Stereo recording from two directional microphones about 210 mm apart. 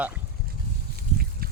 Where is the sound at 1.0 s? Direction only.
45° right (ahead or behind).